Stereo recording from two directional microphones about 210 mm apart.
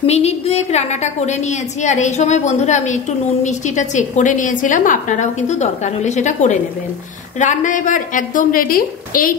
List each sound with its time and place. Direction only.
0.0 s a woman's voice: 30° left (ahead or behind)